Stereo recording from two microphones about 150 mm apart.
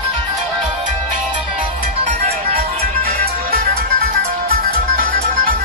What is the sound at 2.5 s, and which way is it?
Music, 90° right.